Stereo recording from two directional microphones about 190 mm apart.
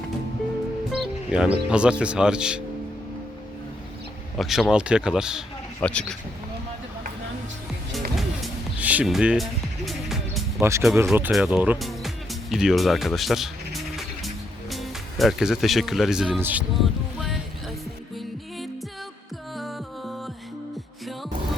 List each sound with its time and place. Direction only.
0.9 s speech: 5° right (ahead or behind)
4.4 s speech: centre (ahead or behind)
8.1 s music: 5° right (ahead or behind)
10.6 s speech: 15° right (ahead or behind)
14.7 s speech: centre (ahead or behind)
19.5 s music: centre (ahead or behind)